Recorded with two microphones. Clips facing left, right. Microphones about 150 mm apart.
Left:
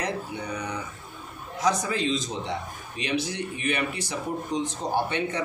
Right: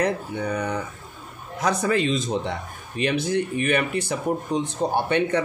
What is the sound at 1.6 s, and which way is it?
Speech, 60° right (ahead or behind).